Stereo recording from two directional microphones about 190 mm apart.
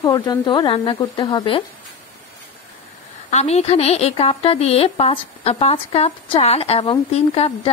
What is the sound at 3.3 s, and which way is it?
A woman's voice, 35° left (ahead or behind).